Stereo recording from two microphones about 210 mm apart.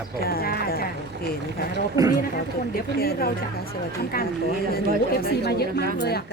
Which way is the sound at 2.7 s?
45° left (ahead or behind).